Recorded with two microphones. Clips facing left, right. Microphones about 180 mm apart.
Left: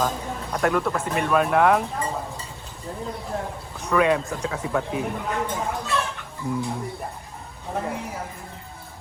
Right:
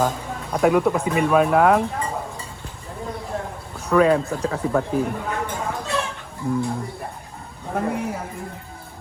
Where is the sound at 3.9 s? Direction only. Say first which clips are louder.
Right 4 dB; centre (ahead or behind).